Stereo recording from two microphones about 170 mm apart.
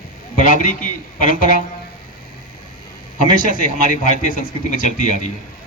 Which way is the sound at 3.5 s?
50° left (ahead or behind).